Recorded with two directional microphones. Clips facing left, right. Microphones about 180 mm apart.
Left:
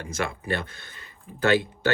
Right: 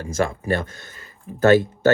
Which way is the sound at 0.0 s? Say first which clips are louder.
Right 7 dB; 40° right (ahead or behind).